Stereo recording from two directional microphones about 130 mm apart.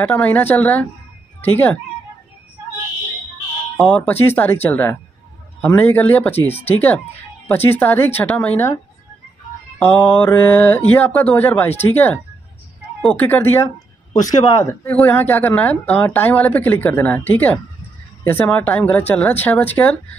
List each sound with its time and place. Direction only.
0.0 s speech: 10° left (ahead or behind)
3.7 s speech: 5° left (ahead or behind)
9.8 s speech: 10° left (ahead or behind)
14.1 s speech: 30° left (ahead or behind)